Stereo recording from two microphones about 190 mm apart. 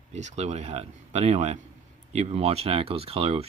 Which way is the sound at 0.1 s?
35° right (ahead or behind).